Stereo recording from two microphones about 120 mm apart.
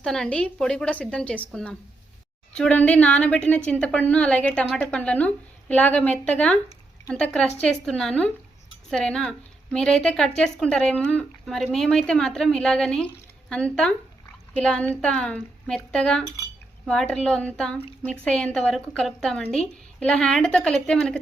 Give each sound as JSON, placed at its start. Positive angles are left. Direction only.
{"t": 0.0, "sound": "a woman's voice", "side_deg": 5}